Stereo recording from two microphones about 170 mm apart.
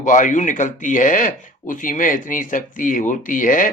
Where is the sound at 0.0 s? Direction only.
50° left (ahead or behind).